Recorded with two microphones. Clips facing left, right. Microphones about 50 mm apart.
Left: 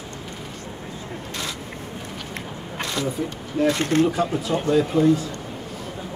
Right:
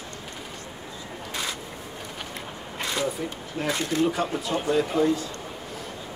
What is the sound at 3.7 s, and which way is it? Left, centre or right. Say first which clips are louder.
Speech: left 6 dB; left.